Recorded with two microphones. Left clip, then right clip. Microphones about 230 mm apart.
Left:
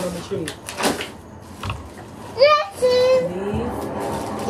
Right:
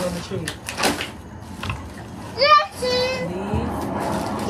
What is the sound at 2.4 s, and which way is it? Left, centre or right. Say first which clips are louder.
Child singing: left 1 dB; centre.